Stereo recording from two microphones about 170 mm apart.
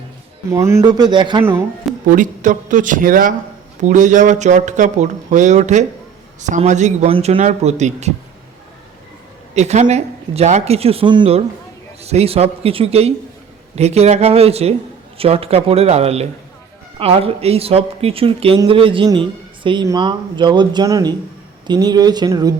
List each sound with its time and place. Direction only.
0.5 s speech: 15° right (ahead or behind)
2.0 s speech: 50° right (ahead or behind)
9.6 s speech: 40° right (ahead or behind); by 22.5 s 20° right (ahead or behind)